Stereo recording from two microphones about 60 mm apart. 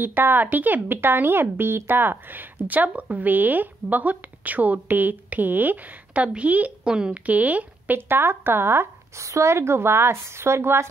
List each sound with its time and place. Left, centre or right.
0.0 s speech: right
9.2 s a woman's voice: right